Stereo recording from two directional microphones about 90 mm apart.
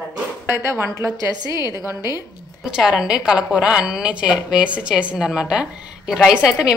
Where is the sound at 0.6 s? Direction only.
30° right (ahead or behind).